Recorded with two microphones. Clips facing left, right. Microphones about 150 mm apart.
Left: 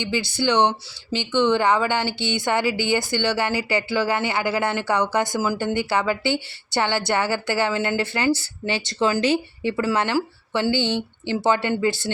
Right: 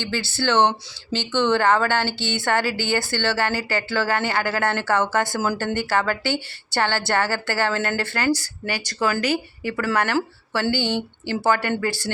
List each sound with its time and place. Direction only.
0.0 s a woman's voice: 15° left (ahead or behind)